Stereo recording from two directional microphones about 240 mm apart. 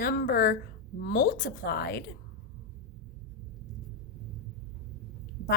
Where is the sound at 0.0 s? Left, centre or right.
Left.